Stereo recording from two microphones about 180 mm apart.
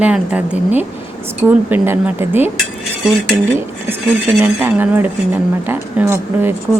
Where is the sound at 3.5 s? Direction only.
10° right (ahead or behind).